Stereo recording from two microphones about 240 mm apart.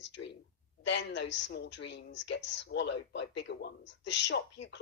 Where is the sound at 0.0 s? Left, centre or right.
Left.